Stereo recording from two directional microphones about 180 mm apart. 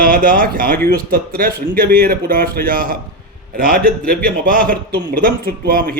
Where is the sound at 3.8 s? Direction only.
5° left (ahead or behind).